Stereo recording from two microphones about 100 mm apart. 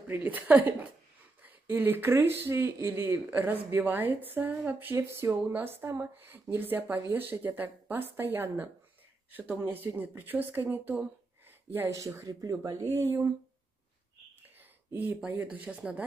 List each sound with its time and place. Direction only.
0.1 s speech: 15° right (ahead or behind)
14.6 s a sound: 20° right (ahead or behind)
15.2 s speech: 15° right (ahead or behind)